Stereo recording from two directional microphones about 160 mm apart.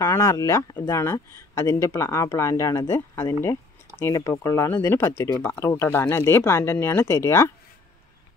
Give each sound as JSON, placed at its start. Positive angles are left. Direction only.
{"t": 0.0, "sound": "speech", "side_deg": 20}